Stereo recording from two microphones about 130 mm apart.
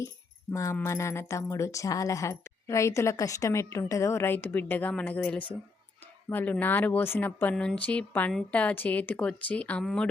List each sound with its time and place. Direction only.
0.5 s speech: 20° left (ahead or behind); by 10.1 s 5° left (ahead or behind)